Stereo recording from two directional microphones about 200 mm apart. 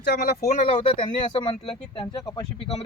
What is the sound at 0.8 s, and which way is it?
Speech, 25° left (ahead or behind).